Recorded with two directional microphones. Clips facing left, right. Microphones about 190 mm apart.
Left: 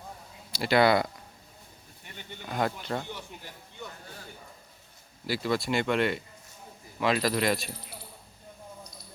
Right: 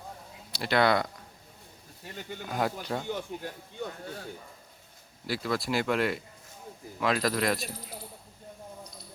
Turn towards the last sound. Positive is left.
turn(degrees=0)  # may be behind; listen again after turning